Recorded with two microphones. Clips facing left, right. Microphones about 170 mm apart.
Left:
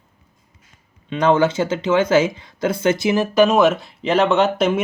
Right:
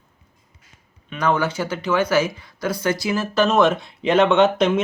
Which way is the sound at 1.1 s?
25° left (ahead or behind).